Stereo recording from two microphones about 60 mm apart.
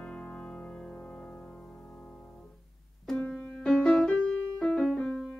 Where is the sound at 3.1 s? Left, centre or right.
Left.